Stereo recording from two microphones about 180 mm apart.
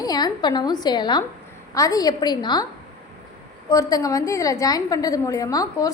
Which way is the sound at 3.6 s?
20° left (ahead or behind).